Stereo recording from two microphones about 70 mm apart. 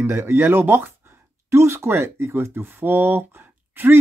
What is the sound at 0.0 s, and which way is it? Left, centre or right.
Speech, right.